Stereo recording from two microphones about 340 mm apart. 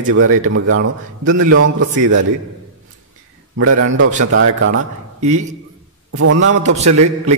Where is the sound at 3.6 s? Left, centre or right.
Right.